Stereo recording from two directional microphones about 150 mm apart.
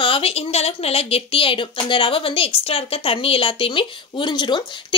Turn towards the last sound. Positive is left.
turn(degrees=30)  # may be behind; listen again after turning